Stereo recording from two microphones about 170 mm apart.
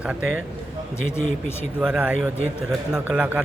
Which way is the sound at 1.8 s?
5° right (ahead or behind).